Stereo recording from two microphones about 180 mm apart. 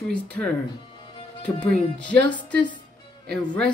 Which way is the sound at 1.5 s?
20° left (ahead or behind).